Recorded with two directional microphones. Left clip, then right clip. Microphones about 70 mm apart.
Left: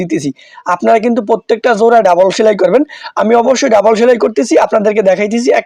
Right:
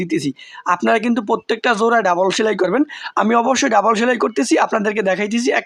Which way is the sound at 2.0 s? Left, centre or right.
Left.